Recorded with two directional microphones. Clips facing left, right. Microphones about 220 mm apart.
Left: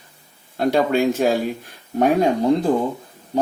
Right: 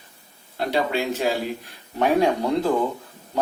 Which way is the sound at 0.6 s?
45° left (ahead or behind).